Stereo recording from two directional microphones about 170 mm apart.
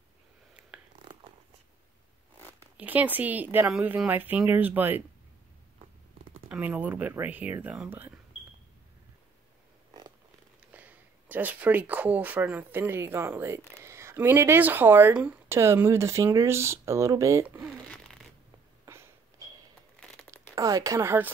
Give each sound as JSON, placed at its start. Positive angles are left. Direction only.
{"t": 2.8, "sound": "speech", "side_deg": -10}
{"t": 6.5, "sound": "speech", "side_deg": -10}
{"t": 10.7, "sound": "speech", "side_deg": -10}
{"t": 17.8, "sound": "zipper", "side_deg": 5}
{"t": 18.9, "sound": "a sound", "side_deg": -15}
{"t": 20.5, "sound": "speech", "side_deg": -20}